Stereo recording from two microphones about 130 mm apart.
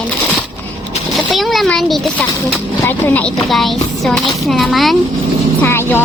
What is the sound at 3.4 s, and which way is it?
Speech, centre (ahead or behind).